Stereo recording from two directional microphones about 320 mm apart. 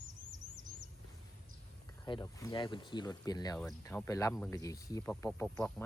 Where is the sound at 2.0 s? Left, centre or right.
Centre.